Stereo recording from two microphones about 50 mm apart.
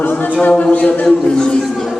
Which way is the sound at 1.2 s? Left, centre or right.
Centre.